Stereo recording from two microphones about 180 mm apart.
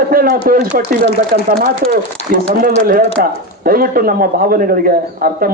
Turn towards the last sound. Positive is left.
turn(degrees=-50)  # may be behind; listen again after turning